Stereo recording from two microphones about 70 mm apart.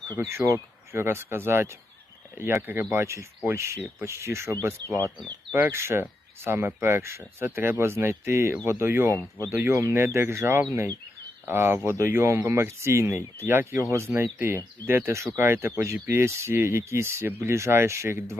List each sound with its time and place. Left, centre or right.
0.2 s speech: right
6.9 s speech: right